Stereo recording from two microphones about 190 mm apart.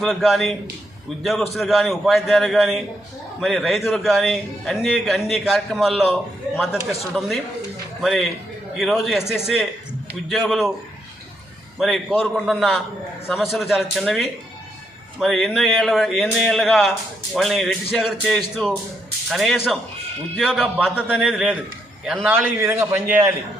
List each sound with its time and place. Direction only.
0.0 s a man's voice: centre (ahead or behind)
11.8 s a man's voice: centre (ahead or behind)